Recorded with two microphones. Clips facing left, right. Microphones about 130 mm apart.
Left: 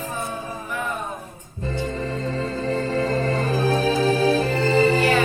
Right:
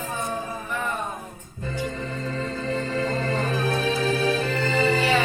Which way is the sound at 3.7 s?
35° left (ahead or behind).